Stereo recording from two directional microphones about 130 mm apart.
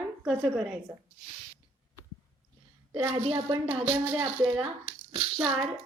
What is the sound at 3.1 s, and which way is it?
Speech, 45° right (ahead or behind).